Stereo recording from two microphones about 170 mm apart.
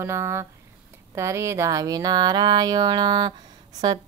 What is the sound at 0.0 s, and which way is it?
A woman's voice, 15° right (ahead or behind).